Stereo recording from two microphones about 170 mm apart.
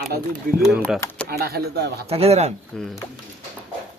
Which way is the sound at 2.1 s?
35° right (ahead or behind).